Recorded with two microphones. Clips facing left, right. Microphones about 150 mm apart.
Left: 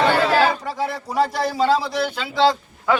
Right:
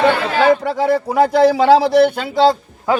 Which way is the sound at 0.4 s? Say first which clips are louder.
Right 8 dB; 60° right (ahead or behind).